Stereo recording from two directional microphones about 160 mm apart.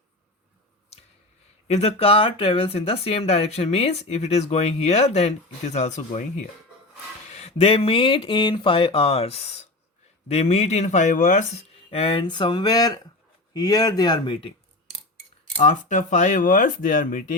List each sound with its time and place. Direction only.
1.6 s speech: 40° left (ahead or behind)
11.9 s speech: 35° left (ahead or behind)
15.5 s speech: 50° left (ahead or behind)